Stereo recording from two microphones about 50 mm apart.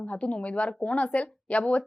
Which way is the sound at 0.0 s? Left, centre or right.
Left.